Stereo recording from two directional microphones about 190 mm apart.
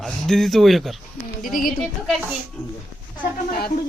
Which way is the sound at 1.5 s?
50° left (ahead or behind).